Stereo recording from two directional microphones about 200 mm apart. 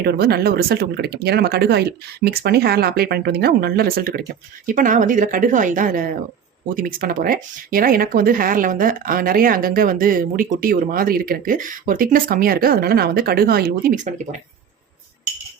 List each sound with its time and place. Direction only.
0.0 s speech: 50° right (ahead or behind)